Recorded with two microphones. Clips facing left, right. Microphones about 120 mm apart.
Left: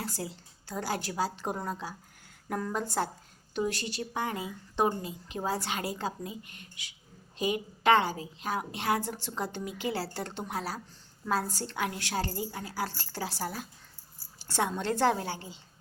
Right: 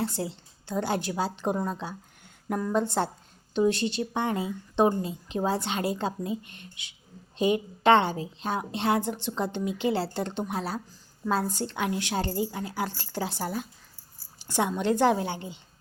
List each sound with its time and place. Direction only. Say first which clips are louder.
0.0 s a woman's voice: right 7 dB; 25° right (ahead or behind)
2.5 s a woman's voice: right 4 dB; 10° right (ahead or behind)
2.7 s a woman's voice: right 8 dB; 25° right (ahead or behind)